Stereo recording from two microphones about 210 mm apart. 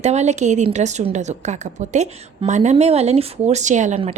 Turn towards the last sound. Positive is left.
turn(degrees=-35)  # may be behind; listen again after turning